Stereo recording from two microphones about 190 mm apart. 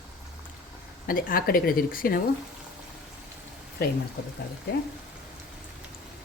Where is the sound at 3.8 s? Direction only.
55° left (ahead or behind).